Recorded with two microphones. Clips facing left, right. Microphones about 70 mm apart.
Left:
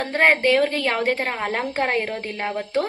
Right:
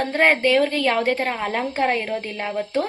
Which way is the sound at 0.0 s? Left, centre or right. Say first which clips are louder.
Even; left.